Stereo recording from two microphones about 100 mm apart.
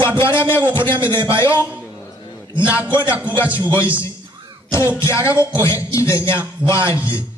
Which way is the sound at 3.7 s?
25° left (ahead or behind).